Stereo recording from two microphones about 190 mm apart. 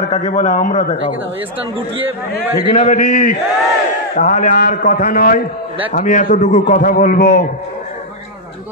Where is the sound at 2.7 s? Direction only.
40° left (ahead or behind).